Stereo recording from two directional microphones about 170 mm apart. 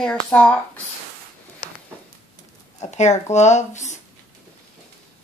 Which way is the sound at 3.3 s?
45° left (ahead or behind).